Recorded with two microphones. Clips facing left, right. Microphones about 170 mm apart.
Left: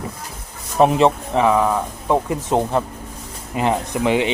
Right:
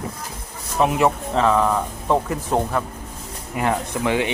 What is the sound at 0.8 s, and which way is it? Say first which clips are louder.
Speech: left 4 dB; 30° left (ahead or behind).